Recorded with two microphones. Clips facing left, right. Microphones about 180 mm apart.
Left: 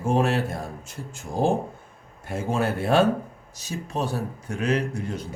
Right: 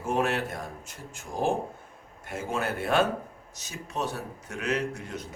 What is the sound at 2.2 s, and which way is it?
A man's voice, 30° left (ahead or behind).